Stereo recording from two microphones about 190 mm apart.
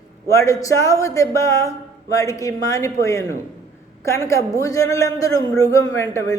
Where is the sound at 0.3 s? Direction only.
15° left (ahead or behind).